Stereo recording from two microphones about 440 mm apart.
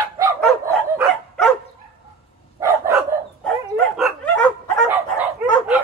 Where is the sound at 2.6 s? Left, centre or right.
Centre.